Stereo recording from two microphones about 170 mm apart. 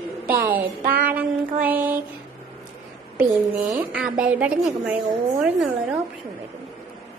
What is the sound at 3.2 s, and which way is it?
Speech, 20° right (ahead or behind).